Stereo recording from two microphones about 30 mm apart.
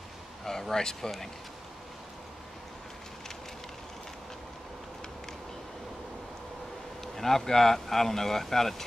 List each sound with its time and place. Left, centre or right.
0.5 s speech: centre
7.2 s speech: centre